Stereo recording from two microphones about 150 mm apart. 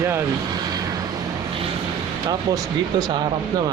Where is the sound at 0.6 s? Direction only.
25° right (ahead or behind).